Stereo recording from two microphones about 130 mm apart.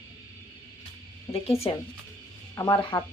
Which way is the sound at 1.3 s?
50° left (ahead or behind).